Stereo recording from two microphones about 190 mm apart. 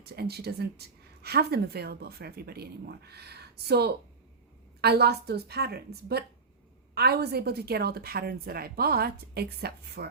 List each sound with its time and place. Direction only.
0.0 s speech: 55° right (ahead or behind)